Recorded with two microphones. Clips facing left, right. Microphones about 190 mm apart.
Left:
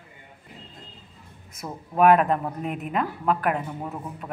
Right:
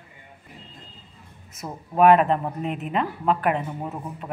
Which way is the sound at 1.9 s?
5° left (ahead or behind).